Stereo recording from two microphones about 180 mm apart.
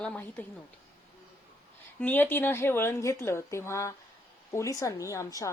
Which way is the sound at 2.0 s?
10° left (ahead or behind).